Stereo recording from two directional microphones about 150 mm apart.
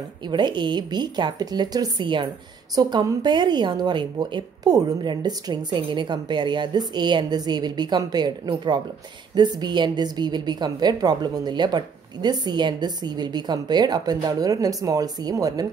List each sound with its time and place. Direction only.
0.3 s a woman's voice: 30° right (ahead or behind)